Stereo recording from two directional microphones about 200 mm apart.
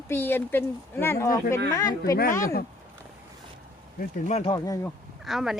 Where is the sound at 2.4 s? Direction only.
50° left (ahead or behind).